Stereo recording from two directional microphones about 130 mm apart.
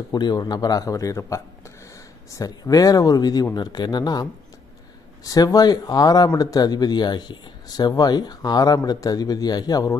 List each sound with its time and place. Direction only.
0.1 s speech: 30° left (ahead or behind)